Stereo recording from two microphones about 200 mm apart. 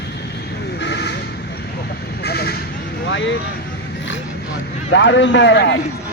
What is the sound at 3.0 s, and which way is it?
Vehicle, 65° left (ahead or behind).